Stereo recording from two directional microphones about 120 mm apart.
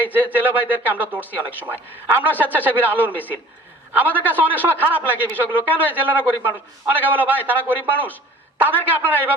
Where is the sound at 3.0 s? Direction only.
15° left (ahead or behind).